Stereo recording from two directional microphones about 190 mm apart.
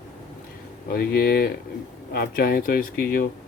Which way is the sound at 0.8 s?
55° left (ahead or behind).